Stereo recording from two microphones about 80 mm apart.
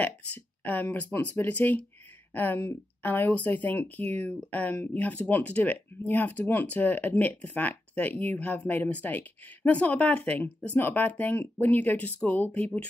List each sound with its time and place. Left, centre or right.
0.0 s speech: left